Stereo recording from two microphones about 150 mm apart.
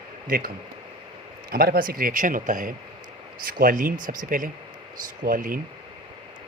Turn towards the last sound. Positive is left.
turn(degrees=-65)  # may be behind; listen again after turning